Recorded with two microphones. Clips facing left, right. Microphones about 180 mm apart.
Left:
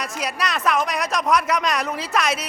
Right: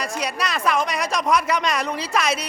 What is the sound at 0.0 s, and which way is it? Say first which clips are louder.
Speech: right 1 dB; centre (ahead or behind).